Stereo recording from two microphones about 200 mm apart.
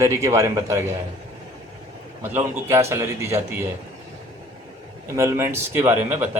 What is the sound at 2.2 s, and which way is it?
A man's voice, 10° right (ahead or behind).